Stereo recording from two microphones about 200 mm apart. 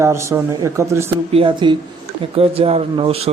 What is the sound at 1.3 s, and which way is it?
Speech, 25° right (ahead or behind).